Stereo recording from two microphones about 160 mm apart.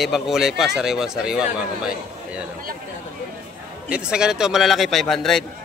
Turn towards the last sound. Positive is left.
turn(degrees=0)  # may be behind; listen again after turning